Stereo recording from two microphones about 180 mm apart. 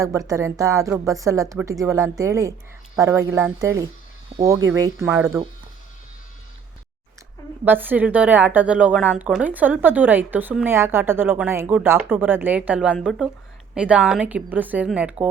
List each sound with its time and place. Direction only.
0.0 s speech: 15° right (ahead or behind)
7.6 s speech: 10° right (ahead or behind)